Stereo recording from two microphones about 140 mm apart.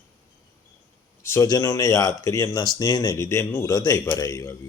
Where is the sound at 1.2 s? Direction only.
25° left (ahead or behind).